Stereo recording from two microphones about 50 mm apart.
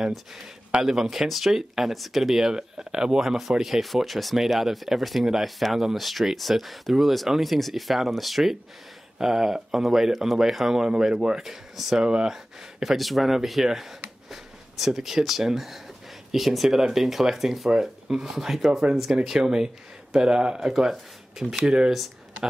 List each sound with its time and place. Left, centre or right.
0.8 s speech: centre
12.0 s speech: centre
12.8 s speech: centre
21.9 s speech: centre